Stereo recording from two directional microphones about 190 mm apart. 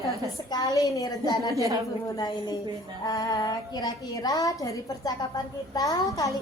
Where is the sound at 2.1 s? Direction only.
20° left (ahead or behind).